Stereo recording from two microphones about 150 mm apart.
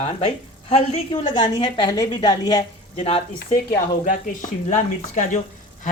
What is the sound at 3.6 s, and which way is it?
Speech, 60° left (ahead or behind).